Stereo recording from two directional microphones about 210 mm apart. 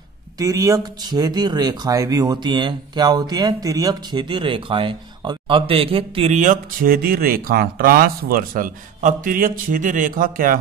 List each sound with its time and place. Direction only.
0.4 s speech: 15° right (ahead or behind); by 10.6 s 40° right (ahead or behind)